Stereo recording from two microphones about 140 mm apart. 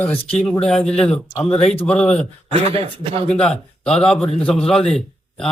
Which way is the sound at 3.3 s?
5° left (ahead or behind).